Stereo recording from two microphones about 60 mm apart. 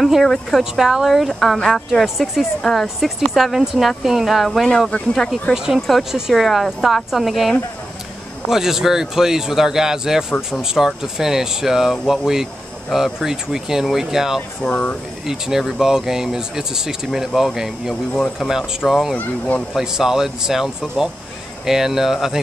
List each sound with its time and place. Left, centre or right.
0.0 s speech: centre
14.7 s speech: left
15.2 s speech: centre
18.1 s speech: centre
18.8 s speech: centre
19.1 s speech: left
19.7 s speech: centre